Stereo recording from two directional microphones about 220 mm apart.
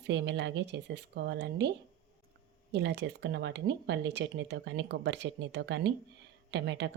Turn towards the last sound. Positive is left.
turn(degrees=-50)  # may be behind; listen again after turning